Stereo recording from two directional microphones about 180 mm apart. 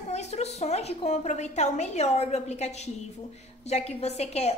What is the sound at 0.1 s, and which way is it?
A woman's voice, 40° left (ahead or behind).